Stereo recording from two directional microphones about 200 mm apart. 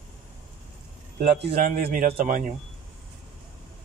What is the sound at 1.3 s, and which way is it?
A man's voice, 50° right (ahead or behind).